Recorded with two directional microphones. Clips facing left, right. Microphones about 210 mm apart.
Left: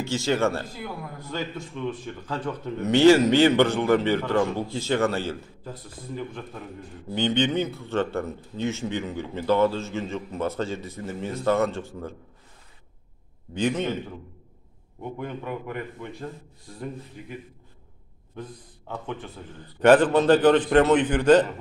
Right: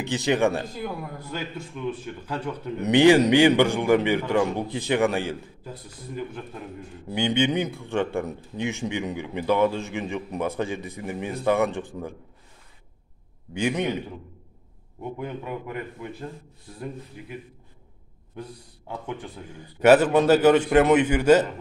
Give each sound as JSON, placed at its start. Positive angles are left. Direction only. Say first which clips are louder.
{"t": 0.0, "sound": "a man's voice", "louder": "right 1 dB", "side_deg": -15}
{"t": 13.5, "sound": "a man's voice", "louder": "even", "side_deg": -10}
{"t": 15.1, "sound": "a man's voice", "louder": "left 1 dB", "side_deg": -5}
{"t": 18.3, "sound": "a man's voice", "louder": "even", "side_deg": -10}